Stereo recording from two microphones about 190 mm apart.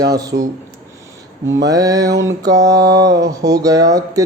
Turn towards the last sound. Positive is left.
turn(degrees=-20)  # may be behind; listen again after turning